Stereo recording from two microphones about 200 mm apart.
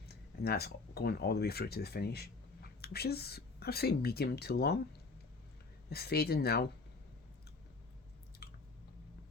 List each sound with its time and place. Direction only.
0.0 s speech: 50° left (ahead or behind)
5.9 s speech: 50° left (ahead or behind)
8.4 s squish: 50° left (ahead or behind)